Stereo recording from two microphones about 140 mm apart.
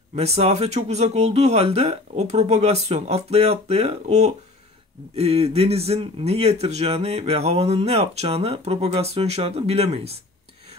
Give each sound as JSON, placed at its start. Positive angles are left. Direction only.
{"t": 0.1, "sound": "a man's voice", "side_deg": -50}